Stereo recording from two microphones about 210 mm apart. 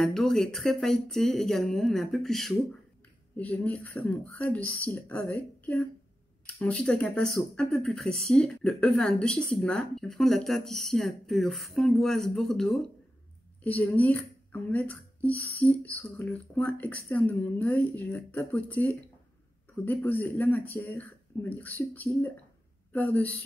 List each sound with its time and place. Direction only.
0.0 s speech: centre (ahead or behind)